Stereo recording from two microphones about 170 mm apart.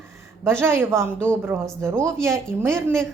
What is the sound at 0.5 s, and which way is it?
A woman's voice, 15° right (ahead or behind).